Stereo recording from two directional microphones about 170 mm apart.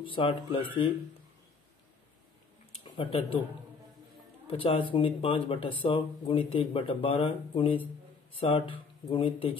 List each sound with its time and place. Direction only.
0.1 s speech: 30° left (ahead or behind)
2.8 s speech: 30° left (ahead or behind)
4.5 s speech: 30° left (ahead or behind)